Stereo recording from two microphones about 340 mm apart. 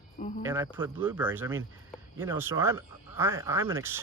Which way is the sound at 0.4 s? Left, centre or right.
Centre.